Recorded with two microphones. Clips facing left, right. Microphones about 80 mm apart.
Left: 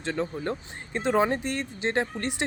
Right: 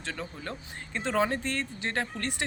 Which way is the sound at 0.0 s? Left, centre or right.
Left.